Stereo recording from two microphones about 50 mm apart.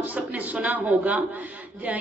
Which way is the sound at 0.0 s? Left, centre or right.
Right.